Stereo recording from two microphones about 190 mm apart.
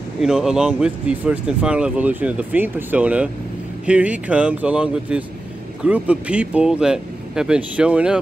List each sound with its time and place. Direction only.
0.2 s speech: 5° right (ahead or behind)